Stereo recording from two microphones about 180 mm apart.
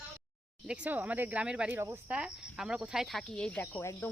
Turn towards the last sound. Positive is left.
turn(degrees=15)  # may be behind; listen again after turning